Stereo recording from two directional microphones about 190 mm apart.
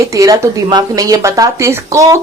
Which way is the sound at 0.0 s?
15° right (ahead or behind).